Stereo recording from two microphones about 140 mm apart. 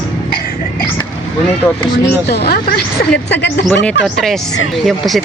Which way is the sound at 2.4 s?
90° left.